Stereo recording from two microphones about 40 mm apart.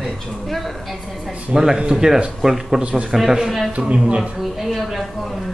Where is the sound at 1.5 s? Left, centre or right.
Centre.